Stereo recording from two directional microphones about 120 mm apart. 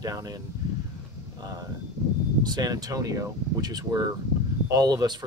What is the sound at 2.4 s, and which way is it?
Speech, 35° right (ahead or behind).